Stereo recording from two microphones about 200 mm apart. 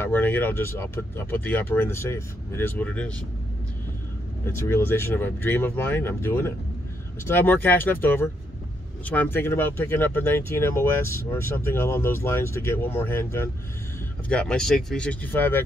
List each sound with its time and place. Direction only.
0.0 s speech: 10° left (ahead or behind)
4.5 s speech: 15° left (ahead or behind)